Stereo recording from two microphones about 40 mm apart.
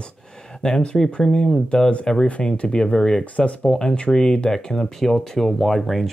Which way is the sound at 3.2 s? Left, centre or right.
Left.